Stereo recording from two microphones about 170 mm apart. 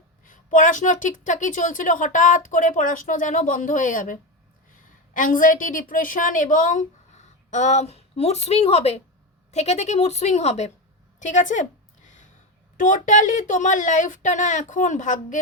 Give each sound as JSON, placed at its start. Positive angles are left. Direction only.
{"t": 0.3, "sound": "a woman's voice", "side_deg": 50}
{"t": 11.2, "sound": "a sound", "side_deg": 45}
{"t": 12.7, "sound": "a woman's voice", "side_deg": 50}